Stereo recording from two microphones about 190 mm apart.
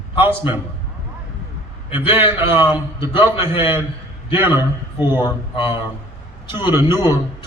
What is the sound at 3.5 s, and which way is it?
Speech, 25° left (ahead or behind).